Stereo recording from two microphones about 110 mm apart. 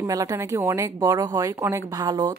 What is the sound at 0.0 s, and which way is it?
Speech, 30° right (ahead or behind).